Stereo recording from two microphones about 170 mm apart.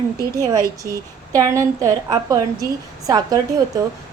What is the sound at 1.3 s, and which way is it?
A woman's voice, 20° right (ahead or behind).